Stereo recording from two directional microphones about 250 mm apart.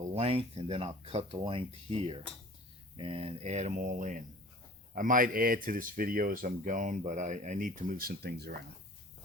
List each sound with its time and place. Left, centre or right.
0.0 s speech: right